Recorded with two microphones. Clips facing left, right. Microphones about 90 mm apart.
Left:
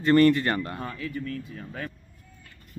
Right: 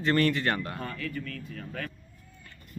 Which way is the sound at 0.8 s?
15° left (ahead or behind).